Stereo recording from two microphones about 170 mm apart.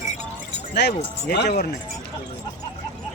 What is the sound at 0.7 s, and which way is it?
Speech, 75° left (ahead or behind).